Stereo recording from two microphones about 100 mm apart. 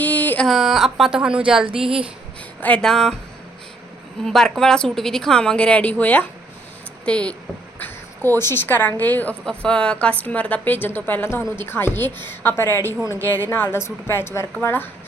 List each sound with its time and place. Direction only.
0.0 s a sound: 15° left (ahead or behind)
0.4 s a woman's voice: centre (ahead or behind)
1.6 s speech: 65° right (ahead or behind)
2.6 s a woman's voice: 15° left (ahead or behind)
4.2 s a woman's voice: 5° left (ahead or behind); by 14.8 s 20° left (ahead or behind)